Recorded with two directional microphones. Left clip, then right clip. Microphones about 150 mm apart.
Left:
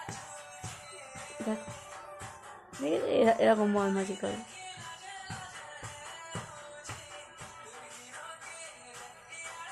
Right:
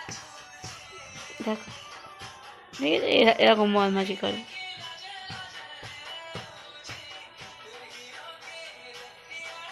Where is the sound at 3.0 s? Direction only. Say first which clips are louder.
Right 6 dB; 10° right (ahead or behind).